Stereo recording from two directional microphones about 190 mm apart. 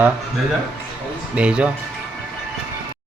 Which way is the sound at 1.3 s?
5° right (ahead or behind).